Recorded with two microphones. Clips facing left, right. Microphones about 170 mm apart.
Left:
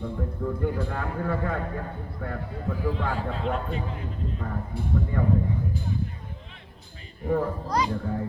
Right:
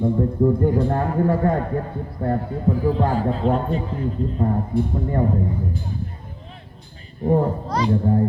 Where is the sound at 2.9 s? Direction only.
40° right (ahead or behind).